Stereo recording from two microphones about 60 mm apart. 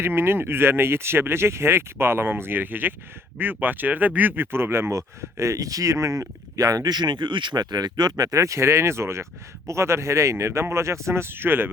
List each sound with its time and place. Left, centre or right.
0.0 s speech: right
4.9 s speech: right